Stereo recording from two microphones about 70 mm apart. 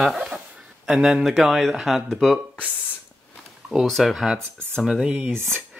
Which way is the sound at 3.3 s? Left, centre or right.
Centre.